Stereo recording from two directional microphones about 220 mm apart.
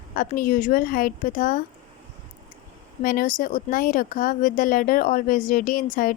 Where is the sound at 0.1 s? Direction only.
40° left (ahead or behind).